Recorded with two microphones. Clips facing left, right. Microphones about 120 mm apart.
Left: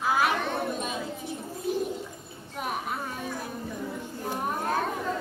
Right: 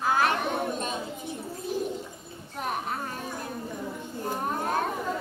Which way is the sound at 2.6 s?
5° left (ahead or behind).